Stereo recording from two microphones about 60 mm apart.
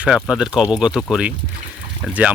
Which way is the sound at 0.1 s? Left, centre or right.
Centre.